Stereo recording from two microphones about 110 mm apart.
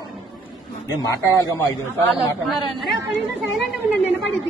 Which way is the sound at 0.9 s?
30° left (ahead or behind).